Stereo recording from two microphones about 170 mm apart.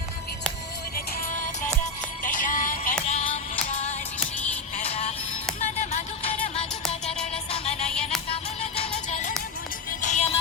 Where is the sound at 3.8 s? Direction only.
40° left (ahead or behind).